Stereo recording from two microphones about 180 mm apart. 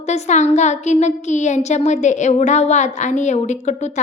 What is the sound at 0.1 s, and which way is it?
A woman's voice, 40° left (ahead or behind).